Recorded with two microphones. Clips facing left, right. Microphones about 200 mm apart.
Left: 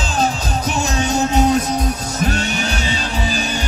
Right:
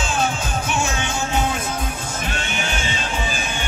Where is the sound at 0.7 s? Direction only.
40° left (ahead or behind).